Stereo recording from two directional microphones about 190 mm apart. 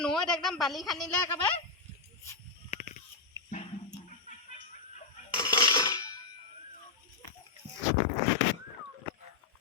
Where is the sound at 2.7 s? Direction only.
40° left (ahead or behind).